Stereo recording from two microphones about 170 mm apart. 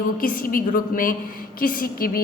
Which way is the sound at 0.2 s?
55° left (ahead or behind).